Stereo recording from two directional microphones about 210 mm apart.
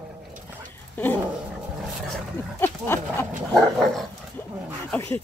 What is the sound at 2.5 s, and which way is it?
Speech, 10° left (ahead or behind).